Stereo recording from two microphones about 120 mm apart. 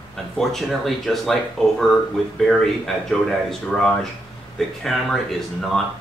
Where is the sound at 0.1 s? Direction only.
Centre (ahead or behind).